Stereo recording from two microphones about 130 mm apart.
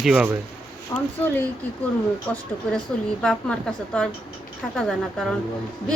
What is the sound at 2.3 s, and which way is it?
A woman's voice, 10° left (ahead or behind).